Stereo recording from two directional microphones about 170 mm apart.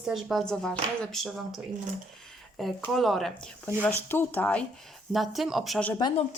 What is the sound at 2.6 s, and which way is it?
Speech, centre (ahead or behind).